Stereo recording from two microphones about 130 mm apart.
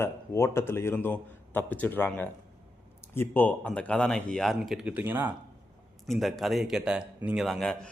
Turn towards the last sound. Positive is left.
turn(degrees=0)  # may be behind; listen again after turning